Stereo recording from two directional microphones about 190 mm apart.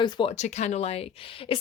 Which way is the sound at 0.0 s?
30° left (ahead or behind).